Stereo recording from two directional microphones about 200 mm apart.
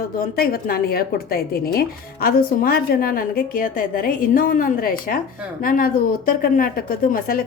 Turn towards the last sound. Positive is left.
turn(degrees=45)  # may be behind; listen again after turning